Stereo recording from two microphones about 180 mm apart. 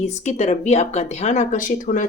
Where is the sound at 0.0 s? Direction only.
40° left (ahead or behind).